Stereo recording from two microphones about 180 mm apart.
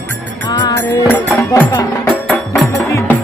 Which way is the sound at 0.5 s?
20° left (ahead or behind).